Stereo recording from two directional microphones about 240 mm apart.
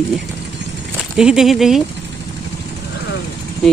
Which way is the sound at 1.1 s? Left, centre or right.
Centre.